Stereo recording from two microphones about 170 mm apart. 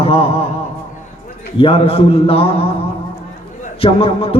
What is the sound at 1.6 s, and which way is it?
Speech, 35° left (ahead or behind).